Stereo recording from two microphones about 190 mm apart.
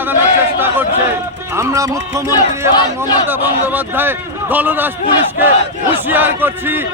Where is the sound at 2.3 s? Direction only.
20° left (ahead or behind).